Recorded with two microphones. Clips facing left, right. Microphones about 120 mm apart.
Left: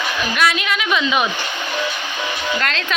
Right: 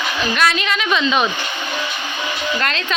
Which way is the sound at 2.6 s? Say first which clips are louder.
Right 1 dB; centre (ahead or behind).